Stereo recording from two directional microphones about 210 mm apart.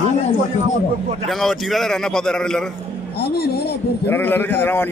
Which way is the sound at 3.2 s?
50° left (ahead or behind).